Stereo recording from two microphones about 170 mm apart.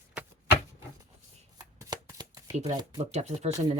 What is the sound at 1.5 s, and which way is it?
Shuffling cards, 25° right (ahead or behind).